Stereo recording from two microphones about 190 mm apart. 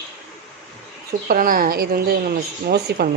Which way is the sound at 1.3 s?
50° right (ahead or behind).